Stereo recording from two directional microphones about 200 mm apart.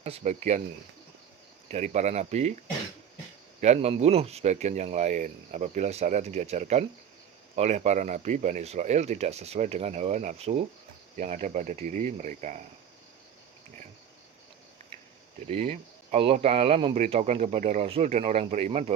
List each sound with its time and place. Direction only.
0.0 s speech: 35° right (ahead or behind)
1.7 s speech: 35° right (ahead or behind)
3.6 s speech: 30° right (ahead or behind)
15.4 s speech: 30° right (ahead or behind)